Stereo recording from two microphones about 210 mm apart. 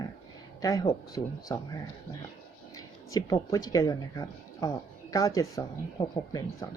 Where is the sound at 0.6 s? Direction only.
15° left (ahead or behind).